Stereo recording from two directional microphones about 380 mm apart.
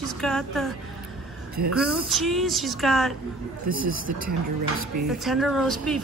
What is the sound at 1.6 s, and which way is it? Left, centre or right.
Speech, right.